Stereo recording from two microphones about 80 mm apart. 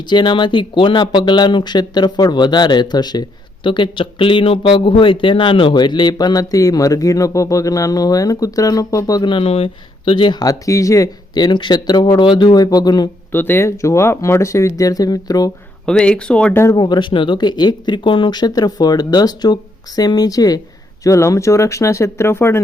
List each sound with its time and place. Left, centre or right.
0.0 s speech: left
10.1 s speech: left
10.4 s speech: left
11.3 s speech: left
12.2 s speech: left
12.5 s speech: left
13.3 s speech: left
15.9 s speech: centre
16.7 s speech: left
21.0 s speech: left